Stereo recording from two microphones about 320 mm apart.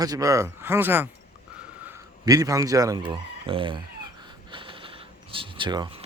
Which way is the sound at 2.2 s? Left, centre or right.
Centre.